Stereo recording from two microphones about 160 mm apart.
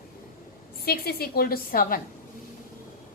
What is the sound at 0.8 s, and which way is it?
A woman's voice, 75° left (ahead or behind).